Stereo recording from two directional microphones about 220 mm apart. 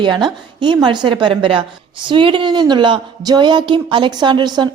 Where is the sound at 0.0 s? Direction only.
20° right (ahead or behind).